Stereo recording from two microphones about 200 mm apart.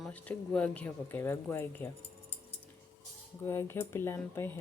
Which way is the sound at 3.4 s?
10° left (ahead or behind).